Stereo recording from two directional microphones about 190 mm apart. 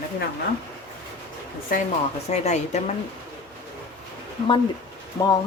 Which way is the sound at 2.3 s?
35° left (ahead or behind).